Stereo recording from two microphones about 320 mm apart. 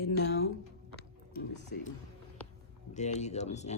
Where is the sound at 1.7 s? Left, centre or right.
Left.